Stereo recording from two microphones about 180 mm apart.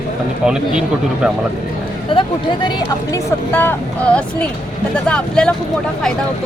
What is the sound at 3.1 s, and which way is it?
Speech, 10° left (ahead or behind).